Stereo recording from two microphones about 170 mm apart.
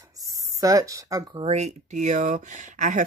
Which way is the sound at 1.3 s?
40° right (ahead or behind).